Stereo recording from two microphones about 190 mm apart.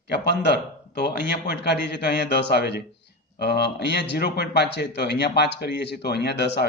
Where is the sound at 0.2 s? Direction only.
60° left (ahead or behind).